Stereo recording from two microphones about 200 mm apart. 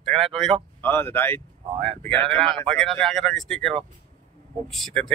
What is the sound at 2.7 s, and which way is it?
Speech, centre (ahead or behind).